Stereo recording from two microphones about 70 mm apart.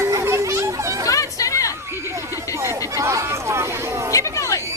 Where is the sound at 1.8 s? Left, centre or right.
Right.